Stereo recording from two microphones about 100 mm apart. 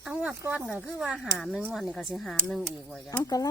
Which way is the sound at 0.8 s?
5° right (ahead or behind).